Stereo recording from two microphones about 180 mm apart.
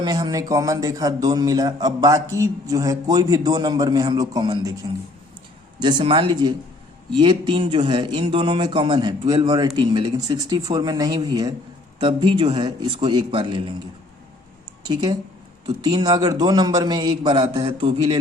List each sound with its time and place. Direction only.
0.0 s a man's voice: 20° right (ahead or behind)
15.6 s a man's voice: 25° right (ahead or behind)